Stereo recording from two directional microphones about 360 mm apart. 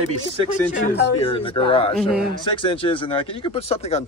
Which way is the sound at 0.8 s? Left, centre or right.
Left.